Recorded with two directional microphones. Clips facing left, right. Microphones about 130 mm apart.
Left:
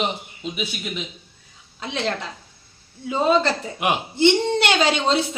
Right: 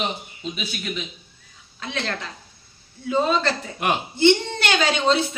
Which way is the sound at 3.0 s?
20° left (ahead or behind).